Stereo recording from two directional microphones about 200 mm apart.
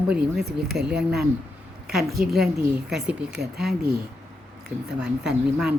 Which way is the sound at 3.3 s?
55° right (ahead or behind).